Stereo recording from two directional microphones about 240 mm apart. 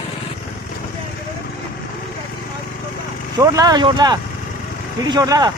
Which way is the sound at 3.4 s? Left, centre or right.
Centre.